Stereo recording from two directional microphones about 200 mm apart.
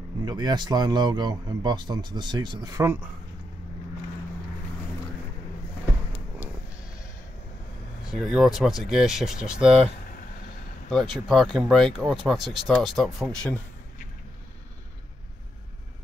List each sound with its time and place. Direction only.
0.2 s speech: 20° right (ahead or behind)
8.0 s speech: centre (ahead or behind)
10.9 s speech: centre (ahead or behind)